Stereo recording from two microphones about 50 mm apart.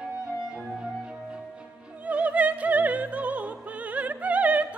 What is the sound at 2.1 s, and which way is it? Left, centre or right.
Opera, right.